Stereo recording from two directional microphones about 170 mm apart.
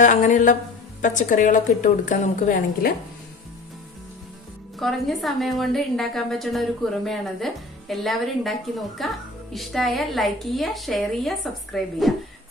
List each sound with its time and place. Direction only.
0.0 s a woman's voice: 45° left (ahead or behind)
4.7 s a woman's voice: centre (ahead or behind)